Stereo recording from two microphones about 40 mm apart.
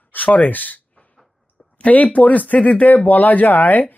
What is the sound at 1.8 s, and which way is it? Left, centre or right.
Speech, left.